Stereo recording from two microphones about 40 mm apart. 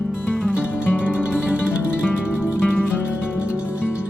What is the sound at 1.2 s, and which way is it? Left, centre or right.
Music, right.